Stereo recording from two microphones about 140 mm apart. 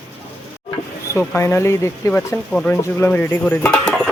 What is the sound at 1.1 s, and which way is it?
Speech, 15° left (ahead or behind).